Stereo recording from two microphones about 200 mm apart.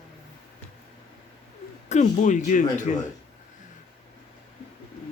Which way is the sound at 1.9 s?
35° left (ahead or behind).